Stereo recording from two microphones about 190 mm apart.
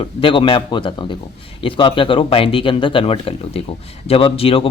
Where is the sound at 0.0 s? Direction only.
25° left (ahead or behind).